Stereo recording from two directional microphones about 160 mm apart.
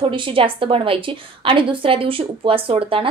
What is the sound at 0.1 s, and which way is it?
A woman's voice, 35° right (ahead or behind).